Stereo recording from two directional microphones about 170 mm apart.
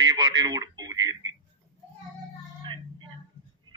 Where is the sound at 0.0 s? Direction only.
25° right (ahead or behind).